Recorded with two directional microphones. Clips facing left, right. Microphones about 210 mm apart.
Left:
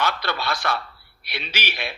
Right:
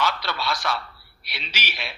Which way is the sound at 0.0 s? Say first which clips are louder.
Left 1 dB; 55° left (ahead or behind).